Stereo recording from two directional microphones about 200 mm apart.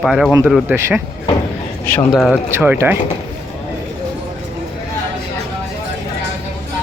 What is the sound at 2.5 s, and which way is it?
Speech, 10° right (ahead or behind).